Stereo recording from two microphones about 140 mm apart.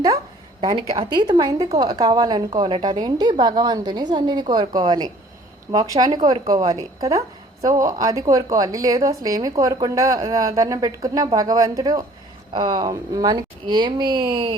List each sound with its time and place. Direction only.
0.6 s a woman's voice: 35° right (ahead or behind)